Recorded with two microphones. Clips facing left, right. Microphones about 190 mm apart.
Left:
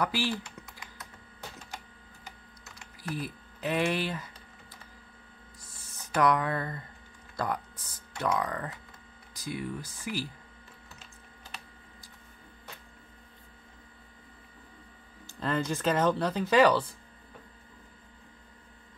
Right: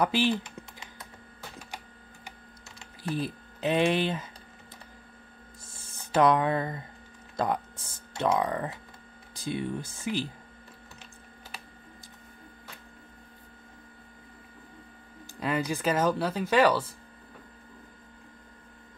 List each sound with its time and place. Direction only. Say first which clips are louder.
0.0 s typing: right 5 dB; 20° right (ahead or behind)
3.0 s speech: right 5 dB; 25° right (ahead or behind)
5.7 s a sound: right 5 dB; 25° right (ahead or behind)
7.3 s speech: right 4 dB; 20° right (ahead or behind)
15.4 s speech: right 1 dB; 10° right (ahead or behind)